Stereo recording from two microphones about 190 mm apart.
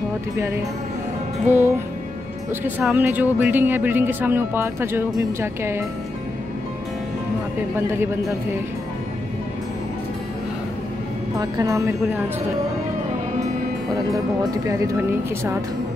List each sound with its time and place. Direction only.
1.5 s speech: 10° right (ahead or behind)
11.3 s speech: 15° right (ahead or behind)
14.1 s speech: 15° right (ahead or behind)